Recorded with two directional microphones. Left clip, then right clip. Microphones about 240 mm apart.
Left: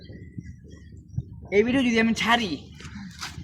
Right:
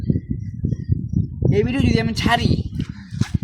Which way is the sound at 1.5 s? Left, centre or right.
Centre.